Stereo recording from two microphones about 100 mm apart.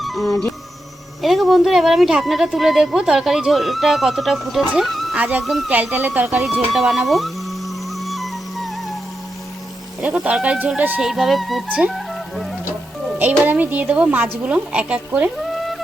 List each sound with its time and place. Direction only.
0.0 s music: centre (ahead or behind)
1.2 s speech: centre (ahead or behind)
4.8 s music: centre (ahead or behind)
5.1 s speech: 15° right (ahead or behind)
5.4 s speech: centre (ahead or behind)
5.7 s speech: 15° right (ahead or behind)
7.9 s music: centre (ahead or behind)
10.0 s speech: 10° right (ahead or behind)
11.0 s speech: centre (ahead or behind)
11.9 s music: centre (ahead or behind)
13.4 s speech: 15° right (ahead or behind)
15.4 s a sound: centre (ahead or behind)